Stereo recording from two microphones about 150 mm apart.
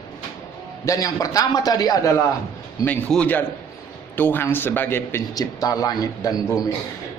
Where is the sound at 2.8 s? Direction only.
10° left (ahead or behind); by 6.6 s 25° left (ahead or behind).